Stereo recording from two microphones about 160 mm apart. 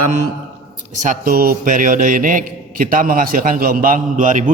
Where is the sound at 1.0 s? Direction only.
55° right (ahead or behind).